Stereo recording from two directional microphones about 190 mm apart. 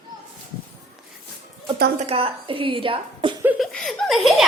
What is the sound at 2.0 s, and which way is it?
A woman's voice, 30° right (ahead or behind).